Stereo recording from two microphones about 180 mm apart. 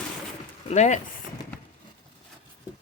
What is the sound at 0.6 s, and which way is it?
Speech, 40° left (ahead or behind).